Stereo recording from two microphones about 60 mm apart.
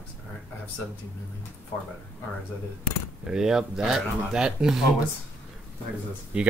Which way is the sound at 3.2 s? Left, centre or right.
Centre.